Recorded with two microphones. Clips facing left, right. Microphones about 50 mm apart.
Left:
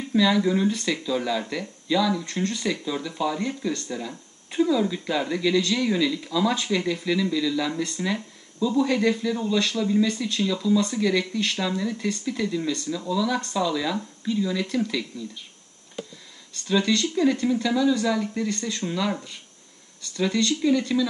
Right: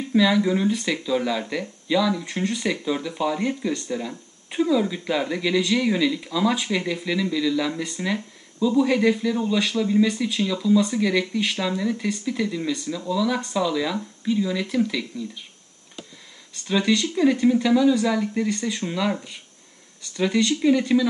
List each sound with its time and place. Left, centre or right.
0.1 s speech: centre
4.1 s a sound: centre
4.6 s speech: centre
16.6 s speech: centre